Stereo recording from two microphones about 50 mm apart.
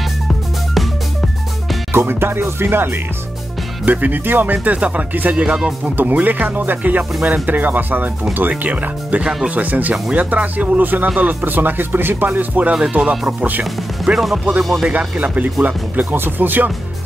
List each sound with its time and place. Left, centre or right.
1.9 s speech: right
3.8 s speech: right
5.4 s speech: centre
5.9 s speech: right
13.0 s speech: centre
13.4 s speech: right
14.1 s speech: centre
14.9 s speech: right